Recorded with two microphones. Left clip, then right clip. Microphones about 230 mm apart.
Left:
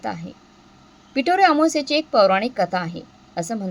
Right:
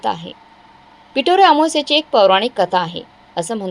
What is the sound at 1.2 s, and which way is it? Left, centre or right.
Speech, right.